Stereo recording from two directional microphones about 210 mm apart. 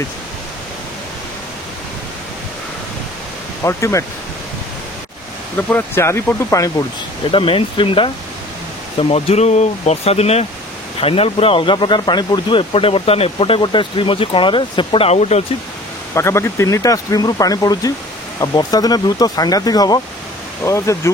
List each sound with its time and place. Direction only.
3.6 s speech: 15° left (ahead or behind)
5.7 s speech: 10° left (ahead or behind)
7.2 s speech: 25° left (ahead or behind)
16.2 s speech: 15° left (ahead or behind)